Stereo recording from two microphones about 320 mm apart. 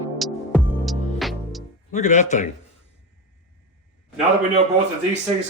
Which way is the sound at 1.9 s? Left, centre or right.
Left.